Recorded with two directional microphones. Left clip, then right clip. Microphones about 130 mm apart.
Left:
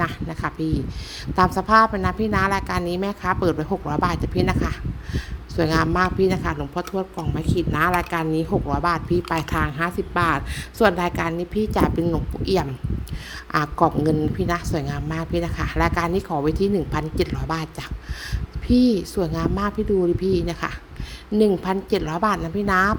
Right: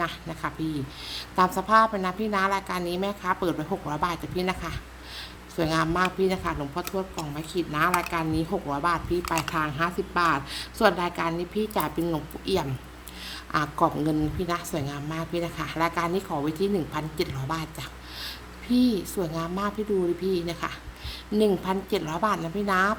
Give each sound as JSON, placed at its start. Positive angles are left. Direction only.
{"t": 0.0, "sound": "a woman's voice", "side_deg": 45}
{"t": 18.7, "sound": "a woman's voice", "side_deg": 45}